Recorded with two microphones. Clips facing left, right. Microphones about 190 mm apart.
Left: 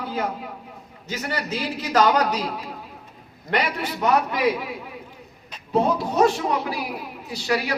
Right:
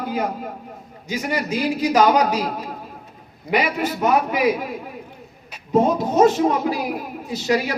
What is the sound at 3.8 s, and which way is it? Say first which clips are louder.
Speech: right 3 dB; 45° right (ahead or behind).